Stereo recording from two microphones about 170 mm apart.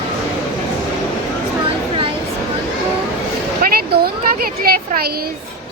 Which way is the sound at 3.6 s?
60° right (ahead or behind).